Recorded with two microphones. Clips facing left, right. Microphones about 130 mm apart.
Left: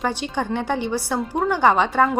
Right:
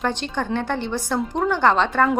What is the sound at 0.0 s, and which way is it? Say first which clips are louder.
A woman's voice: even; 10° left (ahead or behind).